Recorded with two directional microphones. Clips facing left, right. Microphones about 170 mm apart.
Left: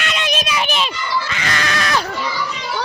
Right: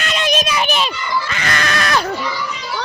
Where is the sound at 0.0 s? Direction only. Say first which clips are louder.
Right 3 dB; 40° right (ahead or behind).